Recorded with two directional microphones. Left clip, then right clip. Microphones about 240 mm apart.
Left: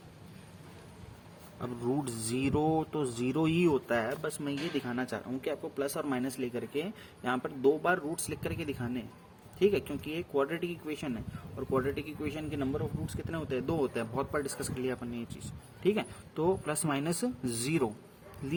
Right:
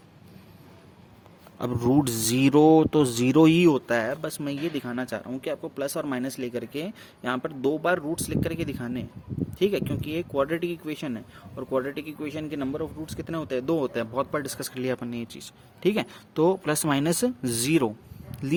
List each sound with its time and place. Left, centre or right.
1.5 s speech: right